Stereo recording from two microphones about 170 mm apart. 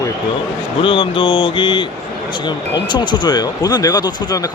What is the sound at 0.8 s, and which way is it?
Speech, 30° left (ahead or behind).